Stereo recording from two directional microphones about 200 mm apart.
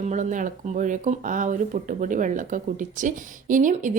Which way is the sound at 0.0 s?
35° right (ahead or behind).